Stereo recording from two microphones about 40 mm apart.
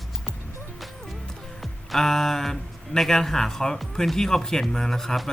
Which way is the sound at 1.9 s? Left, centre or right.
Centre.